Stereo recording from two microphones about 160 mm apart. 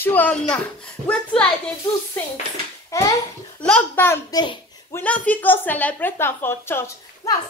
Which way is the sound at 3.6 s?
10° left (ahead or behind).